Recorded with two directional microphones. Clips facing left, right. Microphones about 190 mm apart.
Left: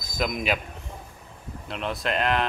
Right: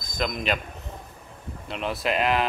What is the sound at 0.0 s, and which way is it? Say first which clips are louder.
Speech: left 1 dB; 5° left (ahead or behind).